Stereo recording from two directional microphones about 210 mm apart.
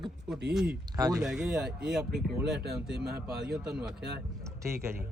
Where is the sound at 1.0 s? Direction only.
15° right (ahead or behind).